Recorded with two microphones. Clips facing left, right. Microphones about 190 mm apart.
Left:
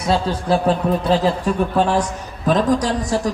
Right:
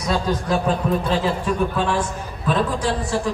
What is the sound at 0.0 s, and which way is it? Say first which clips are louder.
Speech: left 2 dB; 30° left (ahead or behind).